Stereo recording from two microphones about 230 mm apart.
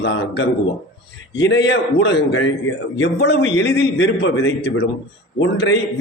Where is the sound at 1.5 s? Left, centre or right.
Left.